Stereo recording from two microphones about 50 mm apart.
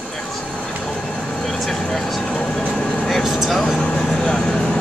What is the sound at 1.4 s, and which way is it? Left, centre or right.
Speech, centre.